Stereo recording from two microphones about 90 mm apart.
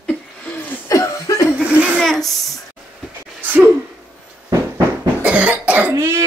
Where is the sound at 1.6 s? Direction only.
15° right (ahead or behind).